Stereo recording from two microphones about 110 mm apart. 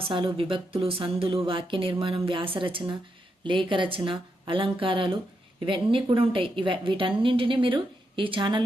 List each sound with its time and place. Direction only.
0.3 s a woman's voice: 55° right (ahead or behind)